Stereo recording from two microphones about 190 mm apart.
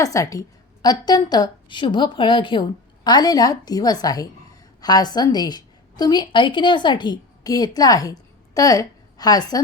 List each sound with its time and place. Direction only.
0.0 s a woman's voice: 15° left (ahead or behind)